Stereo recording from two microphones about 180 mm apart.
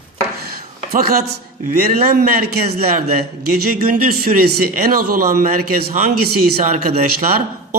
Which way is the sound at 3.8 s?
55° right (ahead or behind).